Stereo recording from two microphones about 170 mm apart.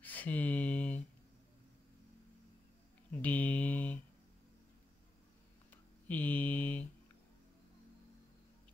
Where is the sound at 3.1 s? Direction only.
10° left (ahead or behind).